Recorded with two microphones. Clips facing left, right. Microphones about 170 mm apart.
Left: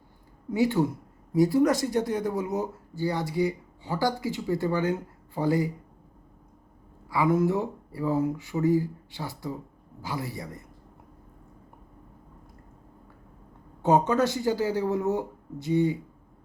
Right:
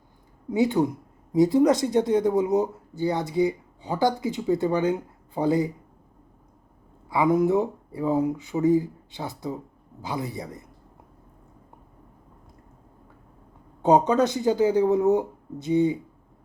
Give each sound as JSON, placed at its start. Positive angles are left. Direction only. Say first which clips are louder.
{"t": 0.5, "sound": "speech", "louder": "right 2 dB", "side_deg": -20}
{"t": 7.1, "sound": "speech", "louder": "right 3 dB", "side_deg": -20}
{"t": 13.8, "sound": "speech", "louder": "right 3 dB", "side_deg": -20}